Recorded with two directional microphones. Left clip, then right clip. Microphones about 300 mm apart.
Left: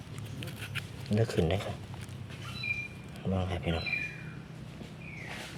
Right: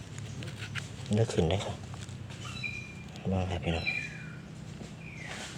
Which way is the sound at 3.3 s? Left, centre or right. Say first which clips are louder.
Even; centre.